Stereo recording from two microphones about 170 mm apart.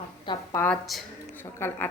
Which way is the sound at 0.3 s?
30° left (ahead or behind).